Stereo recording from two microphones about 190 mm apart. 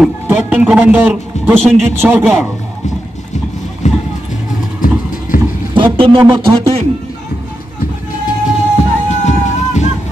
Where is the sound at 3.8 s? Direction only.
40° left (ahead or behind).